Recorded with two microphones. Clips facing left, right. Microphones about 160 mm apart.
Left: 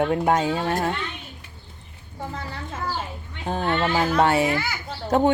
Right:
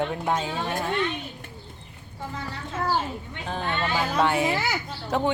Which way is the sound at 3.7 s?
50° left (ahead or behind).